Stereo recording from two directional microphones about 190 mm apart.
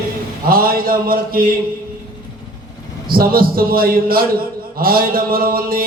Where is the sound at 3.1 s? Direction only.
50° right (ahead or behind).